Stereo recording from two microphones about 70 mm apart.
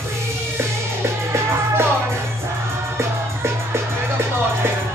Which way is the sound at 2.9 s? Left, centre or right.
Right.